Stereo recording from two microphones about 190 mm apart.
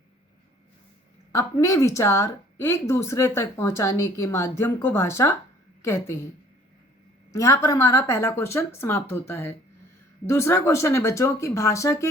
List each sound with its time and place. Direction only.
1.3 s speech: 15° left (ahead or behind)
7.3 s speech: 15° left (ahead or behind)